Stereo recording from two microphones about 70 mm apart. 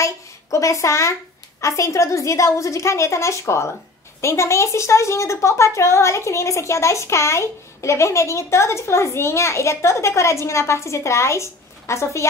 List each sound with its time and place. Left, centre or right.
0.0 s a woman's voice: left